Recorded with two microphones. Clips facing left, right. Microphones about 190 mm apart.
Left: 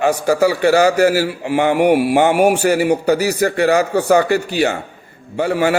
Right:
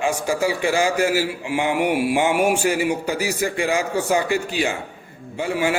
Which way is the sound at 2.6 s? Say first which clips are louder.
Left 6 dB; 50° left (ahead or behind).